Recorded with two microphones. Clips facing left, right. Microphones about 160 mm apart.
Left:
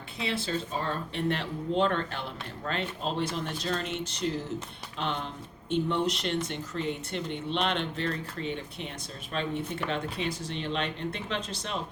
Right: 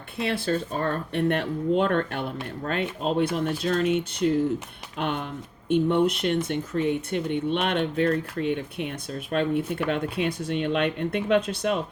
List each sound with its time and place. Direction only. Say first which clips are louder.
0.2 s speech: right 6 dB; 55° right (ahead or behind)